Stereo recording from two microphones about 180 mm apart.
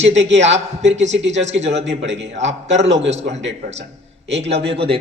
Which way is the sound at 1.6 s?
35° right (ahead or behind).